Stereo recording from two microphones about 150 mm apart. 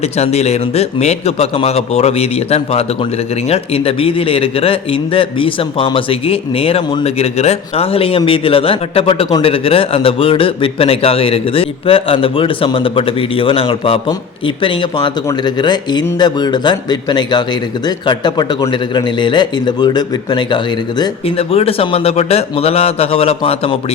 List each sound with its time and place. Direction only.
0.0 s a man's voice: 45° left (ahead or behind); by 20.6 s 30° left (ahead or behind)
21.2 s a man's voice: 40° left (ahead or behind)